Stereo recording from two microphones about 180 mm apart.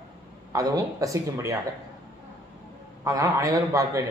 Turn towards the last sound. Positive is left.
turn(degrees=-20)  # may be behind; listen again after turning